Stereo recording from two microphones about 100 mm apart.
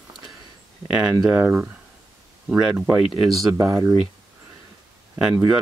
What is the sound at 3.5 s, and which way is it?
Speech, 35° right (ahead or behind).